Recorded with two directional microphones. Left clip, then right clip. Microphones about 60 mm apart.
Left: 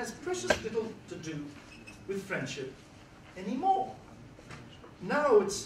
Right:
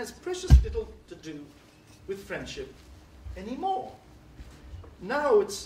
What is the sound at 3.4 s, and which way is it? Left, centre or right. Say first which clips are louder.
Speech: right 1 dB; left.